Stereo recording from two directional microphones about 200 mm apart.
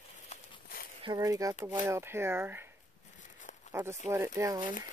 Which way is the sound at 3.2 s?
40° left (ahead or behind).